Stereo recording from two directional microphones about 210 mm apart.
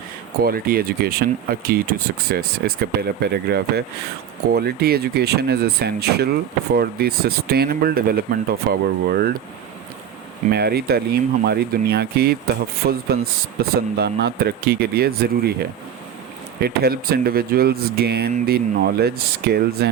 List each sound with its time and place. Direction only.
0.4 s speech: 45° right (ahead or behind)
10.5 s speech: 50° right (ahead or behind)
16.6 s speech: 50° right (ahead or behind)